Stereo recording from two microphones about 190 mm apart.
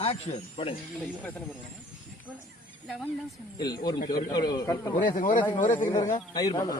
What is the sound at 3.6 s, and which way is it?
A man's voice, 20° left (ahead or behind).